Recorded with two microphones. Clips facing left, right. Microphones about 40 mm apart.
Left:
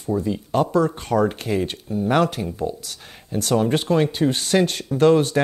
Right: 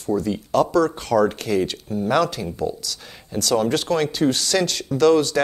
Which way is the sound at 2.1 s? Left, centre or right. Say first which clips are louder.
Left 1 dB; left.